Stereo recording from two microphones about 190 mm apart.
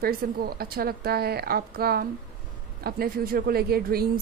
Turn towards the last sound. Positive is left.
turn(degrees=-55)  # may be behind; listen again after turning